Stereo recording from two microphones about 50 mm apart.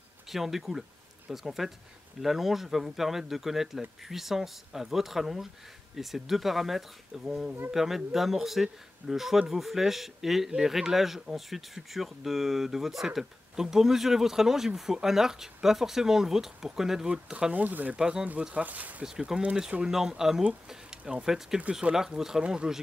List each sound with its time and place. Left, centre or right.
0.3 s speech: centre
17.5 s speech: right
17.9 s speech: centre
18.5 s speech: right
19.0 s speech: centre
22.4 s speech: right